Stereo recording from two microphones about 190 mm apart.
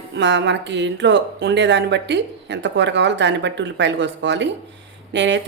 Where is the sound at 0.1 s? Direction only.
70° right (ahead or behind).